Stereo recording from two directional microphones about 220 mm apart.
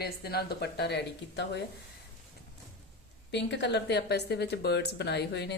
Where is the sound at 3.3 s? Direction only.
50° left (ahead or behind).